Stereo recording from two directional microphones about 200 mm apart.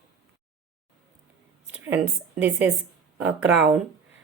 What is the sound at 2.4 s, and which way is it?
Speech, 10° right (ahead or behind).